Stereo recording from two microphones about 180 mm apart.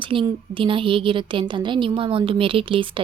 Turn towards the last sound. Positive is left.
turn(degrees=-30)  # may be behind; listen again after turning